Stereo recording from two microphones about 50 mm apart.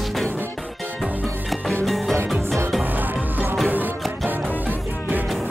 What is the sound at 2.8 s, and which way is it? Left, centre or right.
Music, right.